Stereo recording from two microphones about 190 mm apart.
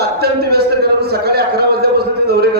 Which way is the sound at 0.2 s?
55° right (ahead or behind).